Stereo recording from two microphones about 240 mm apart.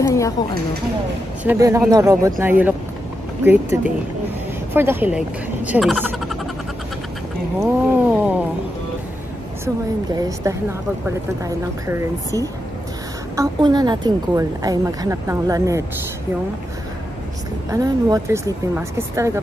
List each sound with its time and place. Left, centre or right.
0.0 s a sound: centre
1.4 s a woman's voice: centre
7.6 s a woman's voice: centre
10.1 s a woman's voice: centre
17.6 s a woman's voice: centre